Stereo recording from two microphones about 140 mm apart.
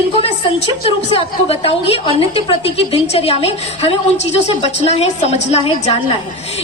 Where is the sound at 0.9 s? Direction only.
45° left (ahead or behind).